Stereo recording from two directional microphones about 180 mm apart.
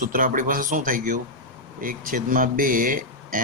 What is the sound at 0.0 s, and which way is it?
Speech, 50° right (ahead or behind).